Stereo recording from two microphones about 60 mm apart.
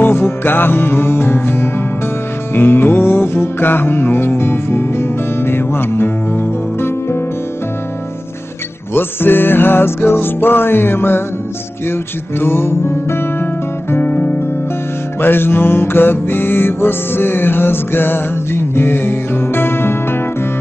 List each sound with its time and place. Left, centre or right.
0.0 s music: left
8.9 s music: left